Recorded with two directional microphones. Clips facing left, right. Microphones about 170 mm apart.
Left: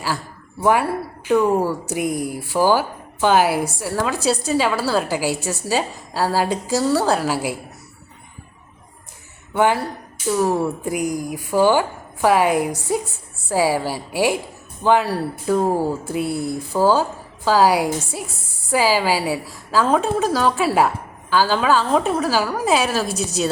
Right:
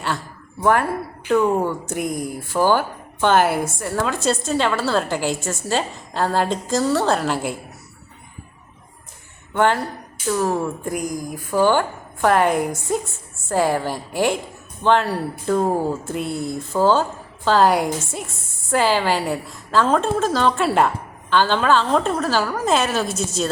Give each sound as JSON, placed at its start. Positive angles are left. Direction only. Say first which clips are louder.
{"t": 0.6, "sound": "a woman's voice", "louder": "left 1 dB", "side_deg": 10}
{"t": 9.5, "sound": "a woman's voice", "louder": "left 1 dB", "side_deg": 10}
{"t": 23.0, "sound": "a woman's voice", "louder": "left 1 dB", "side_deg": 60}